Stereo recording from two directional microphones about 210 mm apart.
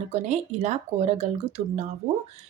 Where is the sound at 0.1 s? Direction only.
30° right (ahead or behind).